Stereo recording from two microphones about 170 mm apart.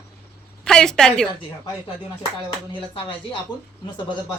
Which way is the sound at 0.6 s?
5° left (ahead or behind).